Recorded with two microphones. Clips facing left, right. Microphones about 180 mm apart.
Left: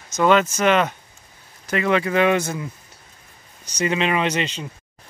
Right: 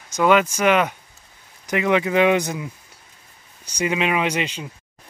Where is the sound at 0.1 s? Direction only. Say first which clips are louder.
Even; 10° right (ahead or behind).